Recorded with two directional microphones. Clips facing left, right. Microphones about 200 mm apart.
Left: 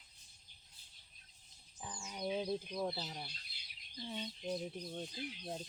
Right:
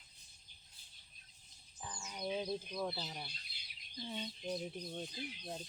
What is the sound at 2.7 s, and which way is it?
Speech, 15° left (ahead or behind).